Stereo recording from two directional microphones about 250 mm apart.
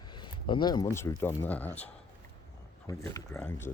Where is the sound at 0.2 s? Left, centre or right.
Centre.